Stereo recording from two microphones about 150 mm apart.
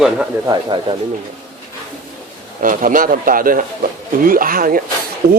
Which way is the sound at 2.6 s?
65° right (ahead or behind).